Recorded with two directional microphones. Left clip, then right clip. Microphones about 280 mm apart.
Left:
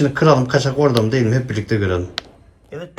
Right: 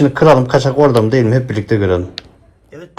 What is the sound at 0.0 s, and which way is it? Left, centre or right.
Speech, centre.